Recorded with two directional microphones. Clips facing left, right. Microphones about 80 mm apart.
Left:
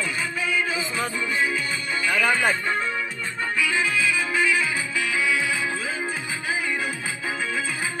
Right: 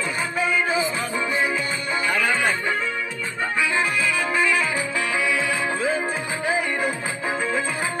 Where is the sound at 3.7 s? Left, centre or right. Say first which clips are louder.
Right 1 dB; right.